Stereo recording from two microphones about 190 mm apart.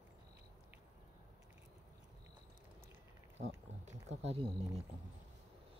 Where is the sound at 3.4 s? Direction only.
35° right (ahead or behind).